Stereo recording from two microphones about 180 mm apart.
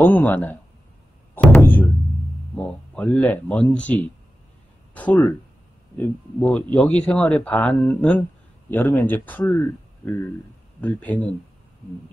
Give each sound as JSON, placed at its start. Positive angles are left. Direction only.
{"t": 0.0, "sound": "a man's voice", "side_deg": 10}
{"t": 1.3, "sound": "music", "side_deg": 10}
{"t": 2.5, "sound": "a man's voice", "side_deg": 5}
{"t": 10.8, "sound": "a man's voice", "side_deg": 10}